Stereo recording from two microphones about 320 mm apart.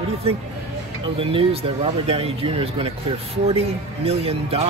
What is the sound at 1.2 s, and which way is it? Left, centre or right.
Speech, centre.